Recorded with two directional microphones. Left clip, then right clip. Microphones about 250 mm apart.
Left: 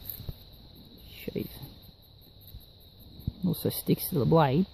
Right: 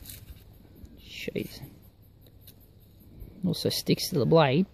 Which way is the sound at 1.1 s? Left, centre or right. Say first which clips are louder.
Right 3 dB; centre.